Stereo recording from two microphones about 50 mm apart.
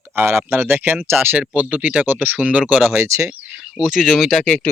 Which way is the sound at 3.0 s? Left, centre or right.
Right.